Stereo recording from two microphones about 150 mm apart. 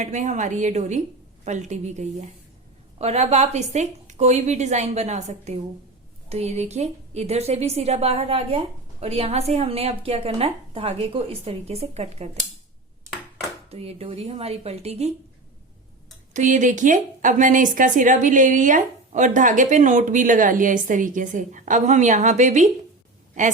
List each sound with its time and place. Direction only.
0.0 s a woman's voice: 50° right (ahead or behind)
13.7 s a woman's voice: 40° right (ahead or behind)
16.3 s a woman's voice: 55° right (ahead or behind)